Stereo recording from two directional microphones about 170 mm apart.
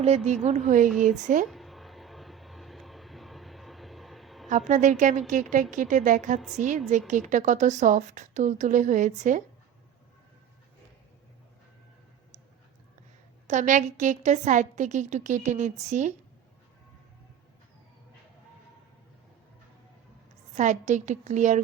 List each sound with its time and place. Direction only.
0.0 s a woman's voice: 40° right (ahead or behind)
1.5 s a sound: centre (ahead or behind)
4.4 s a woman's voice: 45° right (ahead or behind)
13.5 s a woman's voice: 45° right (ahead or behind)
20.6 s a woman's voice: 45° right (ahead or behind)